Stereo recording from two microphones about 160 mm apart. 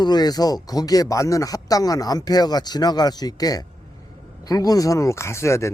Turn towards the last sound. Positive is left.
turn(degrees=20)  # may be behind; listen again after turning